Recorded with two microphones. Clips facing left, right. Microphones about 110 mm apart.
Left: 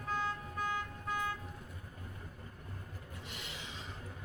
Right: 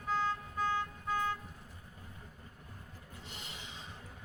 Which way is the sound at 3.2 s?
30° right (ahead or behind).